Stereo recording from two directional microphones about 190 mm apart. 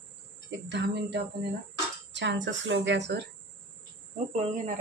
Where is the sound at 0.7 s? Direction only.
65° right (ahead or behind).